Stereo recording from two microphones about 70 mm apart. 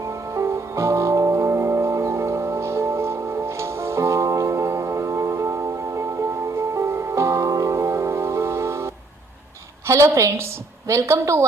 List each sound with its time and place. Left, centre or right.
0.3 s music: right
9.8 s a woman's voice: right